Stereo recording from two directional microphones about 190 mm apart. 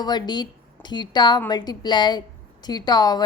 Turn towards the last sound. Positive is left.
turn(degrees=20)  # may be behind; listen again after turning